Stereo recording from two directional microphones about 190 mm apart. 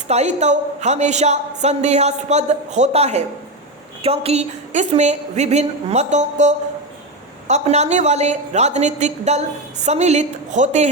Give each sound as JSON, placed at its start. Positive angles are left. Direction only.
{"t": 0.1, "sound": "a woman's voice", "side_deg": -35}